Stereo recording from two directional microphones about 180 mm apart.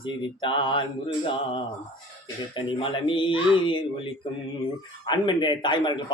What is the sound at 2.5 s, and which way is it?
Speech, 30° left (ahead or behind).